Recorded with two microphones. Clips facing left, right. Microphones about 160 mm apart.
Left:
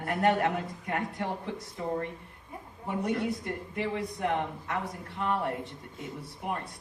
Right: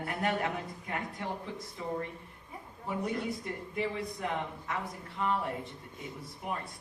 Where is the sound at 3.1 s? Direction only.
65° left (ahead or behind).